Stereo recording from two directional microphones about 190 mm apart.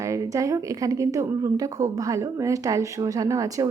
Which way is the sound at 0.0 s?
15° right (ahead or behind).